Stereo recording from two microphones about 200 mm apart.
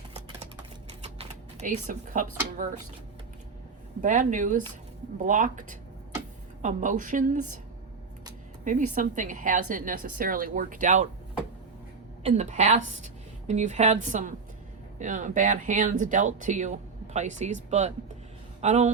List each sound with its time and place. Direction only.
0.9 s a sound: 30° right (ahead or behind)
4.0 s speech: 40° right (ahead or behind)
8.6 s speech: 40° right (ahead or behind)
12.2 s speech: 35° right (ahead or behind)